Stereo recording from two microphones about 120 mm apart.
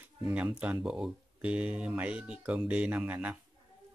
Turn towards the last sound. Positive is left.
turn(degrees=-10)  # may be behind; listen again after turning